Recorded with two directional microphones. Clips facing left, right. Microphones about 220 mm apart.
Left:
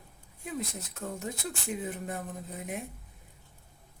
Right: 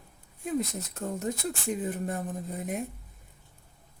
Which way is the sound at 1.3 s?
40° right (ahead or behind).